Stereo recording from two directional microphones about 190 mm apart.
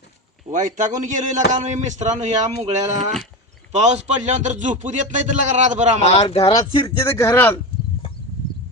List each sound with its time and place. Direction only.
0.5 s speech: 40° right (ahead or behind)
6.1 s speech: 30° left (ahead or behind)
6.8 s a man's voice: 15° left (ahead or behind)